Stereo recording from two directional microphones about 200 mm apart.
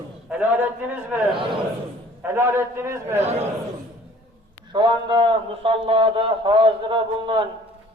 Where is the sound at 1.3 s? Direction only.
25° right (ahead or behind).